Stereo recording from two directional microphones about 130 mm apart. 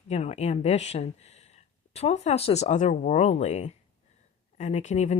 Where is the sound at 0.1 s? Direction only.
55° left (ahead or behind).